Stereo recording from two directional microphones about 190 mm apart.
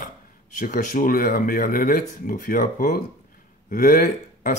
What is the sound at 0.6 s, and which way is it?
Speech, 45° left (ahead or behind).